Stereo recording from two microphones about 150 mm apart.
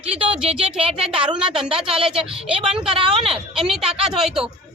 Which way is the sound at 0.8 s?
40° right (ahead or behind).